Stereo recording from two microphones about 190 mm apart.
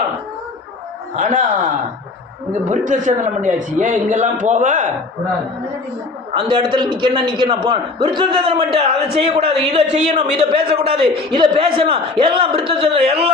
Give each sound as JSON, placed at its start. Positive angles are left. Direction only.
{"t": 1.1, "sound": "a man's voice", "side_deg": -40}
{"t": 6.3, "sound": "a man's voice", "side_deg": -25}